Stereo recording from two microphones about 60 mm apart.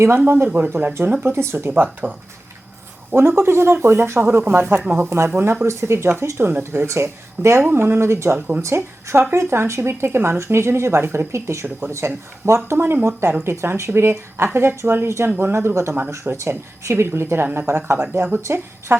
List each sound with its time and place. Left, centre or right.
0.3 s speech: right
1.2 s speech: right
1.7 s speech: right
7.7 s speech: right
12.5 s speech: right